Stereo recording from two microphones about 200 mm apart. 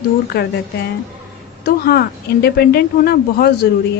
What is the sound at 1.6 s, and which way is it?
Speech, 50° left (ahead or behind).